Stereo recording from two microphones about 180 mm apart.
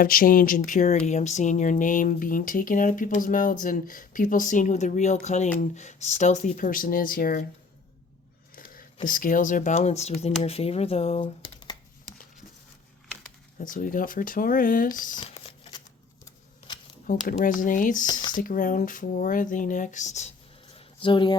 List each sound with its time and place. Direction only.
0.0 s speech: 50° left (ahead or behind)
8.5 s a sound: 50° left (ahead or behind)
9.0 s speech: 50° left (ahead or behind); by 11.8 s 25° left (ahead or behind)
13.6 s speech: 45° left (ahead or behind)
15.2 s a sound: 30° left (ahead or behind)
17.1 s speech: 50° left (ahead or behind)
18.0 s speech: 25° left (ahead or behind)
18.3 s speech: 50° left (ahead or behind)
20.7 s a sound: 30° left (ahead or behind)